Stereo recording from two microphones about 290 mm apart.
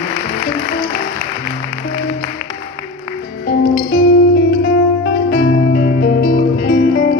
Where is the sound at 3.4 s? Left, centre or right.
Left.